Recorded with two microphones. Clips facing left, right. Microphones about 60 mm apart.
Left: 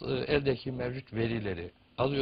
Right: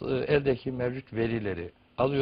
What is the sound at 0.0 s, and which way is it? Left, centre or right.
Speech, centre.